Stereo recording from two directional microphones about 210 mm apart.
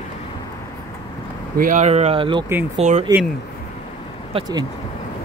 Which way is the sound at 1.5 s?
40° right (ahead or behind).